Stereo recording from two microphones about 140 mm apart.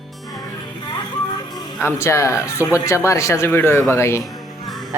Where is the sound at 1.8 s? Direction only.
20° left (ahead or behind).